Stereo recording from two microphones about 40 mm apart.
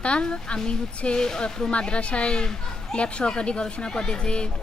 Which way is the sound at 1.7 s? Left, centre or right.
Left.